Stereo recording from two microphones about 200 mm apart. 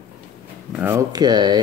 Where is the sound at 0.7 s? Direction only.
10° right (ahead or behind).